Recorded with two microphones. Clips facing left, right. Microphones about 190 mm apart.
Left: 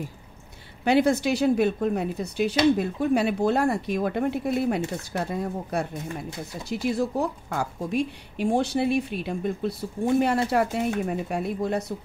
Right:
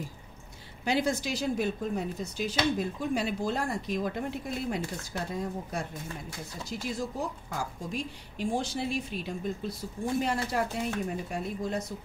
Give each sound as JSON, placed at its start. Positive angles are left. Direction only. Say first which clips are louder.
{"t": 0.8, "sound": "speech", "louder": "left 8 dB", "side_deg": 65}